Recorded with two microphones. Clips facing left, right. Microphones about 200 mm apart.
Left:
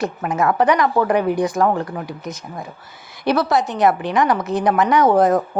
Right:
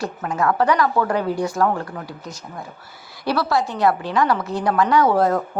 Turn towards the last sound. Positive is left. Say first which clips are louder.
# left 3 dB
turn(degrees=20)  # may be behind; listen again after turning